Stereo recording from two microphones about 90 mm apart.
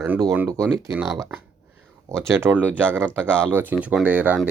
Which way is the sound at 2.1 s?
30° right (ahead or behind).